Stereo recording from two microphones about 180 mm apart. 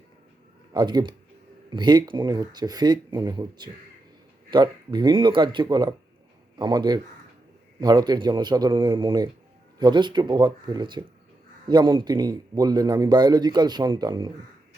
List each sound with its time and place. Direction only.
0.7 s a man's voice: 25° right (ahead or behind)